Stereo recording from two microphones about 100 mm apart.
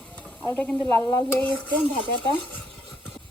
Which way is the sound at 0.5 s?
20° left (ahead or behind).